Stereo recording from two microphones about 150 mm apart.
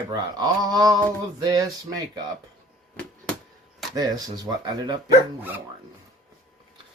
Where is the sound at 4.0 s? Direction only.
25° right (ahead or behind).